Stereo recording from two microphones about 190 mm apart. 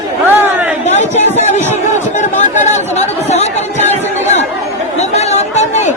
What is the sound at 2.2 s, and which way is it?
Chatter, 40° left (ahead or behind).